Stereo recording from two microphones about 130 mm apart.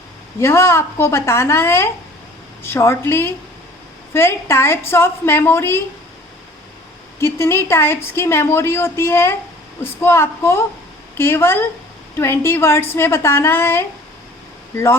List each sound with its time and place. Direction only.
0.3 s a woman's voice: 20° left (ahead or behind)
7.2 s a woman's voice: 20° left (ahead or behind)